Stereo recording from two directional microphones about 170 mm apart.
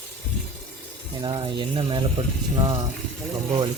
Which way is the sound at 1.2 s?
25° right (ahead or behind).